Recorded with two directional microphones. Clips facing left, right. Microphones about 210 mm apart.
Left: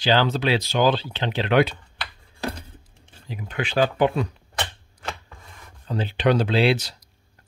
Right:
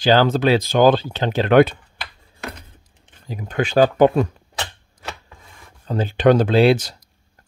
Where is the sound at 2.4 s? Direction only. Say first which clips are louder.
Left 4 dB; 30° left (ahead or behind).